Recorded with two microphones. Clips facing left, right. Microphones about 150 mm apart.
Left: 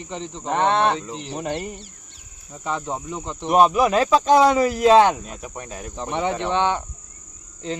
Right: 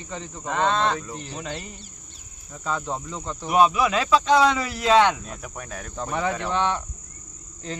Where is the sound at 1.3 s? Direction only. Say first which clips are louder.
Left 10 dB; 60° left (ahead or behind).